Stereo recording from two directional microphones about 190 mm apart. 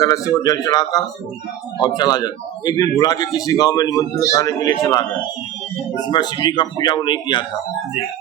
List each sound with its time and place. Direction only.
0.3 s a man's voice: 20° left (ahead or behind)
6.1 s a man's voice: 25° left (ahead or behind)